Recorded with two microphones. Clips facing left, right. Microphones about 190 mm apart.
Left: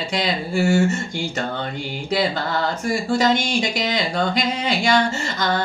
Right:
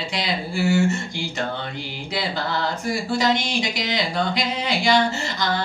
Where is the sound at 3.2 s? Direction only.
45° left (ahead or behind).